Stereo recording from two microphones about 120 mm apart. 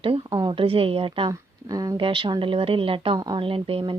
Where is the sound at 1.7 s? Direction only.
30° right (ahead or behind).